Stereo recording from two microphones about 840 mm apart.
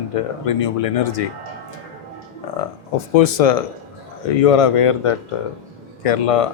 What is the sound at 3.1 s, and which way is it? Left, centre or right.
Speech, left.